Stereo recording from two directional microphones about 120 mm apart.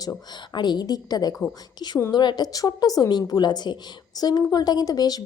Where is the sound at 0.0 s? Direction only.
35° left (ahead or behind).